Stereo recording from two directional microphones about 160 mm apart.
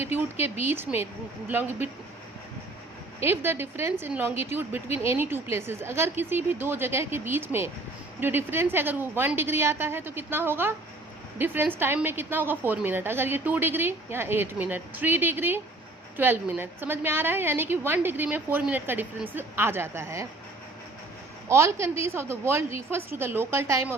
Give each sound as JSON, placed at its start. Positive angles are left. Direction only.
{"t": 0.0, "sound": "a woman's voice", "side_deg": -15}
{"t": 3.2, "sound": "a woman's voice", "side_deg": -15}
{"t": 21.5, "sound": "a woman's voice", "side_deg": -15}